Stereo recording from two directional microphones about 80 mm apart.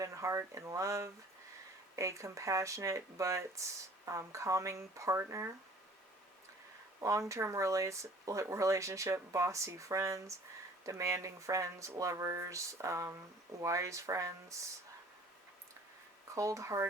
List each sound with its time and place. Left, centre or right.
0.0 s speech: right
7.0 s speech: right
16.3 s speech: right